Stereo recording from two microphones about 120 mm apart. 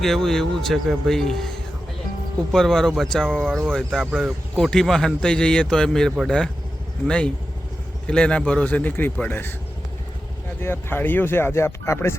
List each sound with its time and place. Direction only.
0.0 s speech: centre (ahead or behind)
2.5 s speech: 5° left (ahead or behind)
8.0 s a man's voice: 10° left (ahead or behind)
10.6 s speech: 20° left (ahead or behind)